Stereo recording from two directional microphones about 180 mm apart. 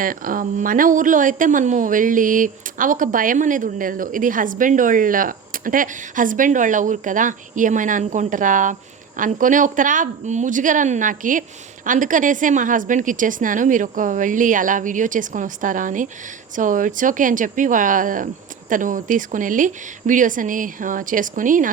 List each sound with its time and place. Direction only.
0.0 s a woman's voice: 50° right (ahead or behind)